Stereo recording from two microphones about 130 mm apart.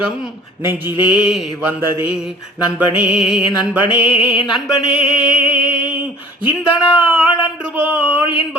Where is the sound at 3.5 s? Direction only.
35° left (ahead or behind).